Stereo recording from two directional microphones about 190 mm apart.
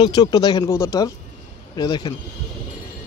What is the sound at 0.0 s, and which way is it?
A man's voice, 20° left (ahead or behind).